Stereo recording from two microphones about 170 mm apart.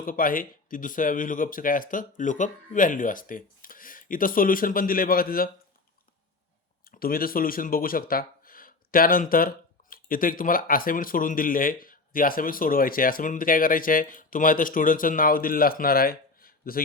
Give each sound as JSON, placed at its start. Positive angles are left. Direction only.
{"t": 0.0, "sound": "speech", "side_deg": 55}
{"t": 6.8, "sound": "speech", "side_deg": 60}